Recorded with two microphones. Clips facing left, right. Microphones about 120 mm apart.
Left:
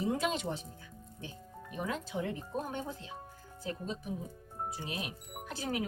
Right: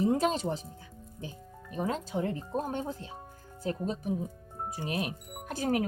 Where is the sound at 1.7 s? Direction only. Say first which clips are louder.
Right 5 dB; 35° right (ahead or behind).